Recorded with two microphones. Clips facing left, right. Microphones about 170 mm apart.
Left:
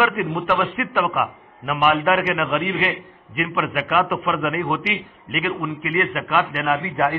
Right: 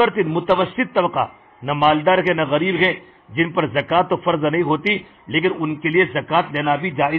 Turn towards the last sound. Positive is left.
turn(degrees=-20)  # may be behind; listen again after turning